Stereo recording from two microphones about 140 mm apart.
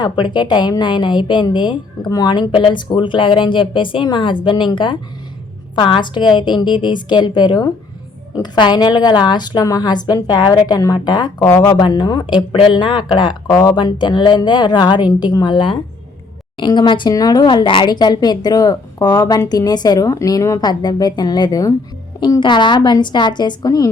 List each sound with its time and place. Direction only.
0.0 s a woman's voice: 35° left (ahead or behind)
11.4 s speech: 15° left (ahead or behind)
11.7 s a woman's voice: 30° left (ahead or behind)